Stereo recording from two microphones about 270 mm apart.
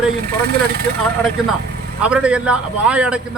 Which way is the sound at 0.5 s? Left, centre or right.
Right.